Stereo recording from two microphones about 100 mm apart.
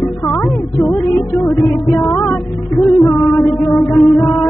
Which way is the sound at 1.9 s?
20° left (ahead or behind).